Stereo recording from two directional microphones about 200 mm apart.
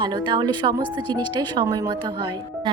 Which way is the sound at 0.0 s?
25° right (ahead or behind).